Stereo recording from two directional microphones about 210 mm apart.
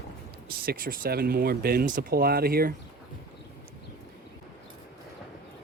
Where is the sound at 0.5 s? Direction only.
45° right (ahead or behind).